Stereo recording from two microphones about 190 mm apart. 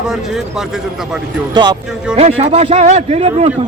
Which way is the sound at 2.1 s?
35° right (ahead or behind).